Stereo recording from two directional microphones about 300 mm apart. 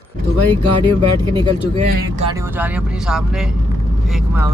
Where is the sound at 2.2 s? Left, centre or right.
Centre.